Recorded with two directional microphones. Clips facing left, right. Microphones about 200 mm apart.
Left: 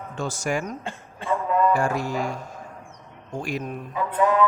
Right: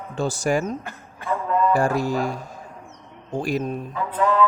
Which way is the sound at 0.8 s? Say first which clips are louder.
Left 2 dB; 25° left (ahead or behind).